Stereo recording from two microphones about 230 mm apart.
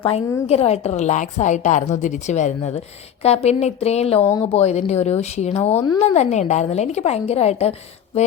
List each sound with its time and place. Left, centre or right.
0.0 s a woman's voice: left
5.7 s speech: centre
6.0 s a woman's voice: left